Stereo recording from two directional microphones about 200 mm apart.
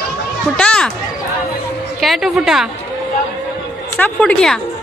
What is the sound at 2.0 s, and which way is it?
Speech, centre (ahead or behind).